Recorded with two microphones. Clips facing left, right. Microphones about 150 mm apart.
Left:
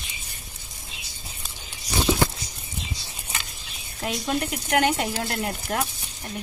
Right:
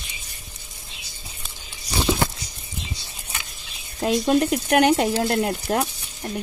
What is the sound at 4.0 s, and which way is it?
Speech, 35° right (ahead or behind).